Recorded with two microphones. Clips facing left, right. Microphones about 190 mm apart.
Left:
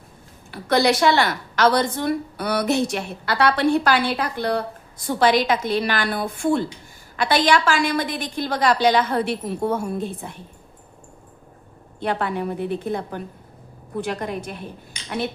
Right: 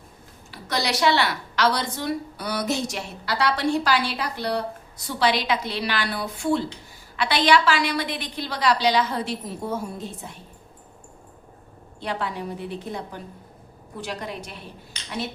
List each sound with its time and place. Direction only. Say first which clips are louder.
0.5 s a woman's voice: left 8 dB; 55° left (ahead or behind)
11.9 s a woman's voice: left 5 dB; 55° left (ahead or behind)